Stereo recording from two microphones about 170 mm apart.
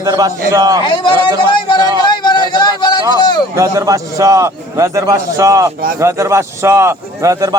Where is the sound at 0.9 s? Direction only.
25° left (ahead or behind).